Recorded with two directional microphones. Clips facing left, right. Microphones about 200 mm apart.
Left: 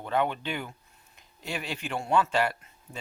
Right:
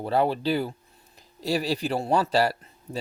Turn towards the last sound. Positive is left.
turn(degrees=-35)  # may be behind; listen again after turning